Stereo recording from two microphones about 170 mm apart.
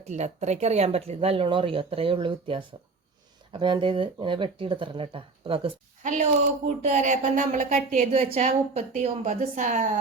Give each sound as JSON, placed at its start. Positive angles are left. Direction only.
{"t": 0.0, "sound": "speech", "side_deg": -40}
{"t": 6.0, "sound": "a woman's voice", "side_deg": -45}